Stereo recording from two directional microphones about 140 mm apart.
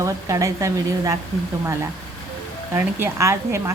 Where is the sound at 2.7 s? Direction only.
20° right (ahead or behind).